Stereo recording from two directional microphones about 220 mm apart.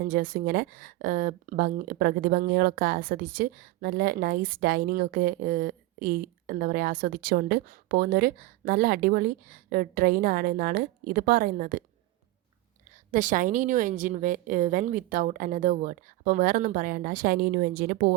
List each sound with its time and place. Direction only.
0.0 s speech: 40° right (ahead or behind)
13.1 s speech: 35° right (ahead or behind)